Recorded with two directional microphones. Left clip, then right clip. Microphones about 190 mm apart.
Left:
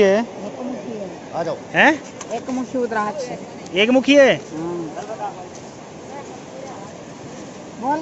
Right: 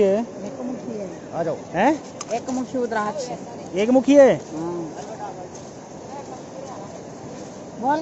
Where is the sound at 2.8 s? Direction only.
10° left (ahead or behind).